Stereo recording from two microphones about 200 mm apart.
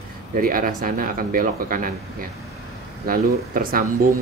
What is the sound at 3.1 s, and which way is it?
Speech, 45° right (ahead or behind).